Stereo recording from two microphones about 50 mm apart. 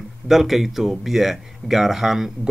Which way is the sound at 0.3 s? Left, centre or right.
Centre.